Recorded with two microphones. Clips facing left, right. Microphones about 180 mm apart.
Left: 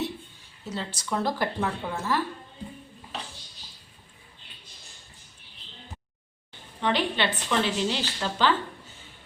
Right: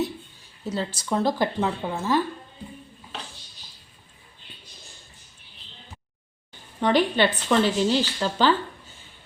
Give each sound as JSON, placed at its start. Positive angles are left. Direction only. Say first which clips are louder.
{"t": 0.6, "sound": "speech", "louder": "right 5 dB", "side_deg": -35}
{"t": 6.7, "sound": "speech", "louder": "right 6 dB", "side_deg": -45}